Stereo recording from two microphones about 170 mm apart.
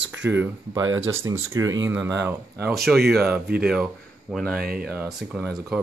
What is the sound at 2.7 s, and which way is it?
Speech, centre (ahead or behind).